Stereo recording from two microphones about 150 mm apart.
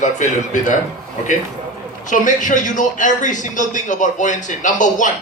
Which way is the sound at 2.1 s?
60° left (ahead or behind).